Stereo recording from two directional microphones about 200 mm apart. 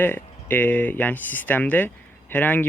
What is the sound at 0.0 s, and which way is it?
Speech, 10° left (ahead or behind).